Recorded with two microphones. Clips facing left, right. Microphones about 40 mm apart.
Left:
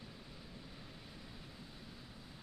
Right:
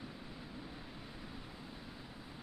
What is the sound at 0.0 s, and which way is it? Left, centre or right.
Vehicle, right.